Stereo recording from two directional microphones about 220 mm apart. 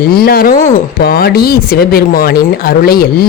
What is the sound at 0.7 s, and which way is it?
Speech, 45° left (ahead or behind).